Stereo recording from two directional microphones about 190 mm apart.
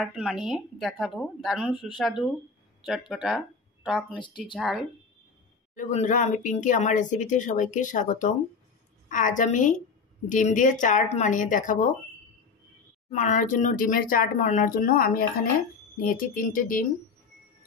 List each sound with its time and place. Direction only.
0.0 s a woman's voice: centre (ahead or behind)
5.8 s speech: 40° left (ahead or behind)
13.1 s speech: 40° left (ahead or behind)